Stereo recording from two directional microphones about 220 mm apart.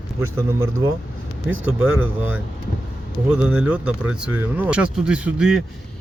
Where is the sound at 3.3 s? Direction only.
5° right (ahead or behind).